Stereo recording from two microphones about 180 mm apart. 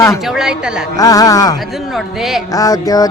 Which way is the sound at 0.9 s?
20° left (ahead or behind).